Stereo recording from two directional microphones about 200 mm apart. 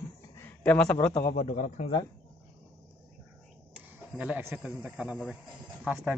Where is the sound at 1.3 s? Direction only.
35° left (ahead or behind).